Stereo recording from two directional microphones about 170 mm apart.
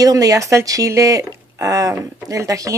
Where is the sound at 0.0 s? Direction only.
20° right (ahead or behind).